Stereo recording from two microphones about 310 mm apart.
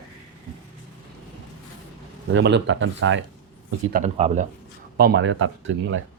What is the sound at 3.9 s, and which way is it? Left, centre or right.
Speech, right.